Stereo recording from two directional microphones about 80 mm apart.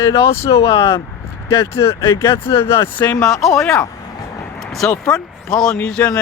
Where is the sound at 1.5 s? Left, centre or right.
Left.